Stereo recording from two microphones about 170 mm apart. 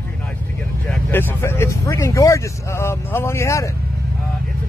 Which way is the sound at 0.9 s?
10° left (ahead or behind).